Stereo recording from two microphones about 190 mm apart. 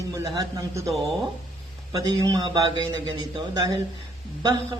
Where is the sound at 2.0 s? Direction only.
20° right (ahead or behind).